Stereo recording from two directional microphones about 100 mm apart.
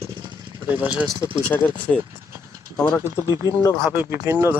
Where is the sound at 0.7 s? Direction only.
15° right (ahead or behind).